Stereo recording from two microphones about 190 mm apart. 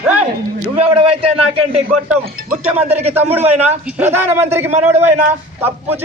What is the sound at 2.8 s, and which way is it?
Speech, 35° right (ahead or behind).